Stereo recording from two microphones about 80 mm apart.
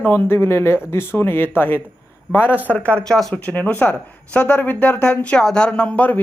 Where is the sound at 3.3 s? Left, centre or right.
Centre.